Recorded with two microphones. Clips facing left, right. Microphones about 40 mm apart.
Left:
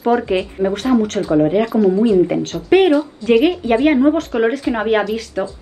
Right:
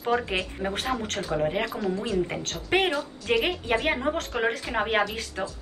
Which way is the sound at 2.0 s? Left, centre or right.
Left.